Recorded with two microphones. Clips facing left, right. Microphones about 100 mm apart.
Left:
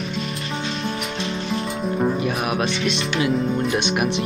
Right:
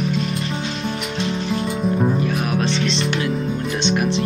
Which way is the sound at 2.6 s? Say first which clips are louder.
Right 2 dB; 30° right (ahead or behind).